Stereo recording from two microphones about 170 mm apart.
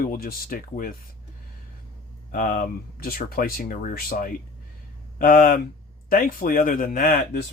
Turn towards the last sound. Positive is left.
turn(degrees=55)  # may be behind; listen again after turning